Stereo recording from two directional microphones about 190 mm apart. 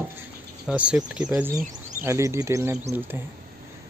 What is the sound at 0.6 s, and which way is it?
Speech, 5° right (ahead or behind).